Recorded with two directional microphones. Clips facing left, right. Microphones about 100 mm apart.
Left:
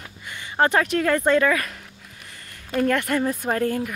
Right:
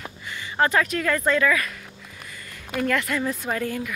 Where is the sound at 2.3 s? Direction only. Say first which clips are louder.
Right 3 dB; 50° left (ahead or behind).